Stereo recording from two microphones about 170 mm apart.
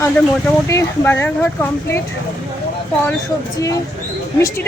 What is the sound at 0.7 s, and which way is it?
Speech, 15° left (ahead or behind).